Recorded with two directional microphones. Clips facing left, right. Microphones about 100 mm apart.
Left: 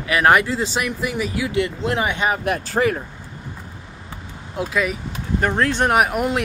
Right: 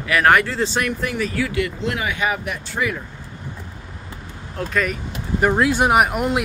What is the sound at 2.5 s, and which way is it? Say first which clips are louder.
Speech: left 5 dB; 45° left (ahead or behind).